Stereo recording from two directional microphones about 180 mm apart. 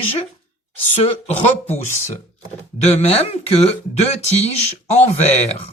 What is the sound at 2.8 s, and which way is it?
Speech, 35° left (ahead or behind).